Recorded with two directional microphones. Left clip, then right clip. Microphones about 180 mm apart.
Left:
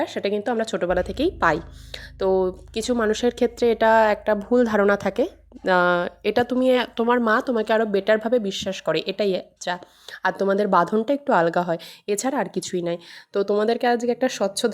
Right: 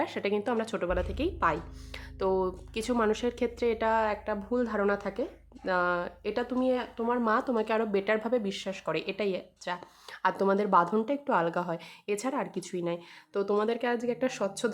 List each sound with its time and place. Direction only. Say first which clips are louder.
0.0 s speech: left 6 dB; 20° left (ahead or behind)
2.1 s speech: left 8 dB; 20° left (ahead or behind); by 7.2 s 40° left (ahead or behind)
7.2 s speech: left 7 dB; 30° left (ahead or behind)